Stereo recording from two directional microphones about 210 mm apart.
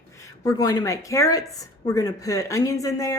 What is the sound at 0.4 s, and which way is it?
Speech, 20° left (ahead or behind).